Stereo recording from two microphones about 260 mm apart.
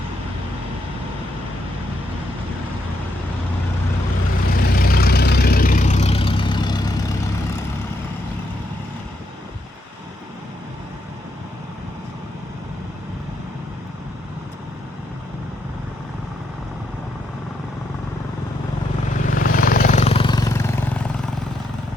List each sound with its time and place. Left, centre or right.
4.5 s vehicle: left; by 7.0 s centre
19.2 s vehicle: left; by 20.7 s centre